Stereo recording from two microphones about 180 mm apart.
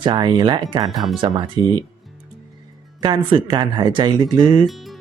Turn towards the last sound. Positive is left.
turn(degrees=0)  # may be behind; listen again after turning